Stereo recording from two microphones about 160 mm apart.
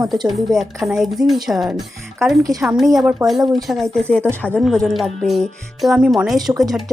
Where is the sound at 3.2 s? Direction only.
20° right (ahead or behind).